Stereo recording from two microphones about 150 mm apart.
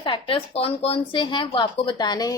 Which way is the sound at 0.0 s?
35° left (ahead or behind).